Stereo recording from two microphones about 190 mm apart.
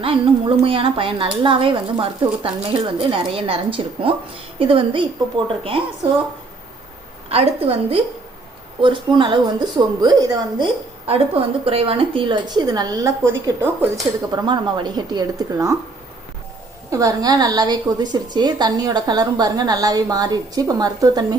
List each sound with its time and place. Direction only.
0.0 s a woman's voice: 30° right (ahead or behind)
7.3 s a woman's voice: 30° right (ahead or behind); by 15.8 s 15° right (ahead or behind)
16.9 s a woman's voice: 20° right (ahead or behind)